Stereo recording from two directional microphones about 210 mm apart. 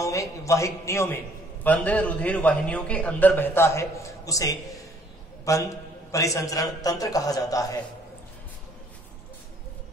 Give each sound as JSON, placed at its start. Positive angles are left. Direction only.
{"t": 0.0, "sound": "a man's voice", "side_deg": 15}